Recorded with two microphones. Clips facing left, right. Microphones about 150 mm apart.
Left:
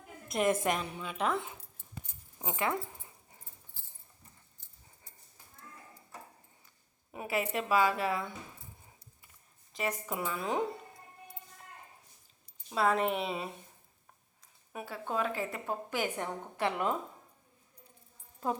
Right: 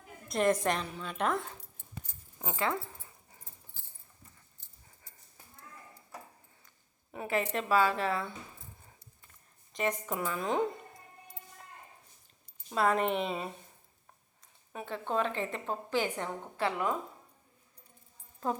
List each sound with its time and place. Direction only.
0.3 s a woman's voice: 5° left (ahead or behind)
2.4 s speech: 20° left (ahead or behind)
7.1 s a woman's voice: 10° left (ahead or behind)
9.7 s speech: 5° left (ahead or behind)
12.7 s speech: centre (ahead or behind)
14.7 s a woman's voice: 10° left (ahead or behind)